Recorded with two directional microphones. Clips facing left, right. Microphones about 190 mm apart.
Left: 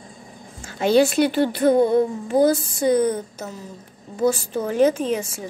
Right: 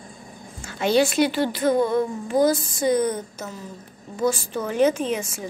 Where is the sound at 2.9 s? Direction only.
30° left (ahead or behind).